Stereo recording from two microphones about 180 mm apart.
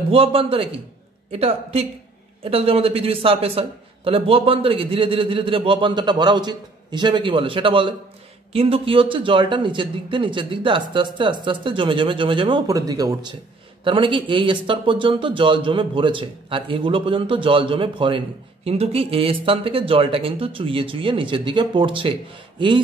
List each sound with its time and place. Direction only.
0.1 s a man's voice: 30° right (ahead or behind)